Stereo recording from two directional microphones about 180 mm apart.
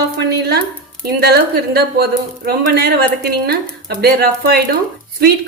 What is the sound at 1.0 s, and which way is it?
A woman's voice, 60° right (ahead or behind).